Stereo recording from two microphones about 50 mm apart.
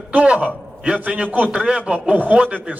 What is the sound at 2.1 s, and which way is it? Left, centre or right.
Speech, right.